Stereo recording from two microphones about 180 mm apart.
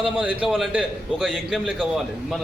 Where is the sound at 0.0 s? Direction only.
5° right (ahead or behind).